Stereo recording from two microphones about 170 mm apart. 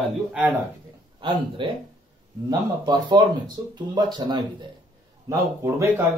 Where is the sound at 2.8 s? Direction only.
25° right (ahead or behind).